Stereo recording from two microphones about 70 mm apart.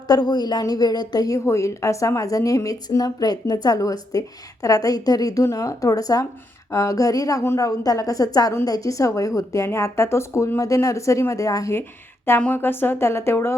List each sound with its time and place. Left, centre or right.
0.1 s speech: left
0.6 s speech: left
1.5 s a woman's voice: left
11.7 s a woman's voice: left